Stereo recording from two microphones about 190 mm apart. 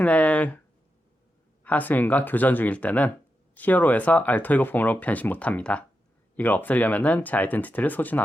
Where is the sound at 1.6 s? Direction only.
10° left (ahead or behind).